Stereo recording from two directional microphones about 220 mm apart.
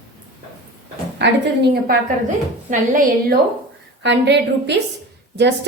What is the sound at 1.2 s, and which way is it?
Speech, 50° right (ahead or behind).